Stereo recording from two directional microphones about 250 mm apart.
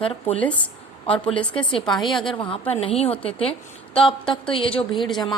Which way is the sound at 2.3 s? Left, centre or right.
Left.